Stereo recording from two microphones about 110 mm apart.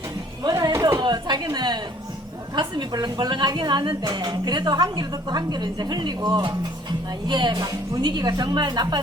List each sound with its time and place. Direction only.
0.4 s music: 40° right (ahead or behind)
0.9 s chatter: 40° right (ahead or behind)
1.5 s a sound: 40° right (ahead or behind)
2.6 s a woman's voice: 40° right (ahead or behind)